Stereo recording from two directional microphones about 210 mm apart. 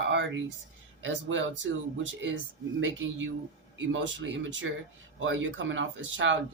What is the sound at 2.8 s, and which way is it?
Speech, 65° right (ahead or behind).